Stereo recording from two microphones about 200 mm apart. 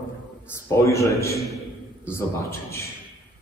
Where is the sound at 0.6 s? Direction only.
15° left (ahead or behind).